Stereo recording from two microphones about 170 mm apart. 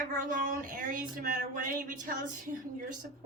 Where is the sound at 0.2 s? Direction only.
55° right (ahead or behind).